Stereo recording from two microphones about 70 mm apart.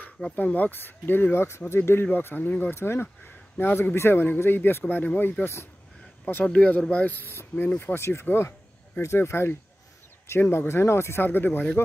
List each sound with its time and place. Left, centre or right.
0.4 s speech: left
2.7 s speech: left
6.4 s speech: centre